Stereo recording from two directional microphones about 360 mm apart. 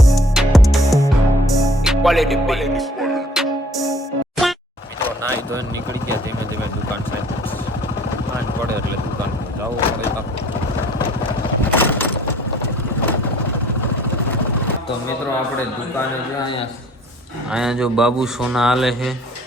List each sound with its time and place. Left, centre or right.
0.0 s music: centre
11.7 s a sound: centre
17.5 s speech: centre